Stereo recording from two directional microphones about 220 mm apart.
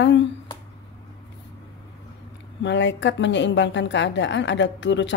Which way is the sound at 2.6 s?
55° left (ahead or behind).